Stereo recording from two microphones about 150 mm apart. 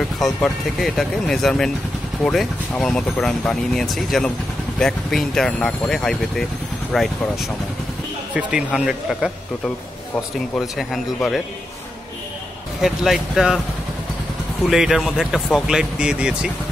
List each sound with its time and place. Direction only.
0.2 s speech: centre (ahead or behind)
10.6 s speech: centre (ahead or behind)
12.8 s speech: centre (ahead or behind)
14.7 s speech: centre (ahead or behind)